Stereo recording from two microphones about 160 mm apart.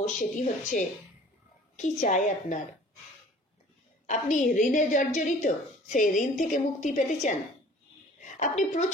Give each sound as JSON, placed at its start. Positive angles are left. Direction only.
{"t": 0.0, "sound": "a woman's voice", "side_deg": 50}
{"t": 4.1, "sound": "a woman's voice", "side_deg": 50}